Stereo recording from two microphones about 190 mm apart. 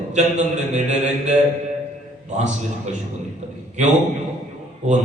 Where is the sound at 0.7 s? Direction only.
40° right (ahead or behind).